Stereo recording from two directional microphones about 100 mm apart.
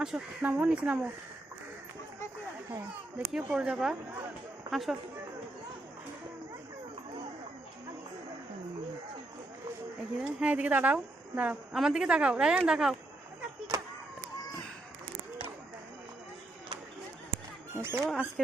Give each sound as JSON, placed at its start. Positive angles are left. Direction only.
{"t": 0.0, "sound": "speech", "side_deg": -10}
{"t": 3.2, "sound": "speech", "side_deg": -10}
{"t": 10.2, "sound": "speech", "side_deg": -15}
{"t": 11.7, "sound": "speech", "side_deg": -5}
{"t": 17.7, "sound": "speech", "side_deg": -20}
{"t": 18.1, "sound": "speech", "side_deg": 5}